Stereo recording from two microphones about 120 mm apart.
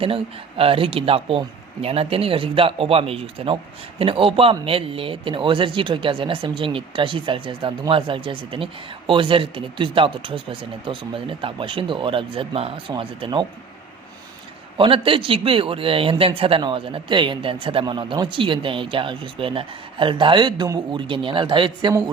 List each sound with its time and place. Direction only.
0.0 s speech: 50° right (ahead or behind)
14.8 s speech: 45° right (ahead or behind)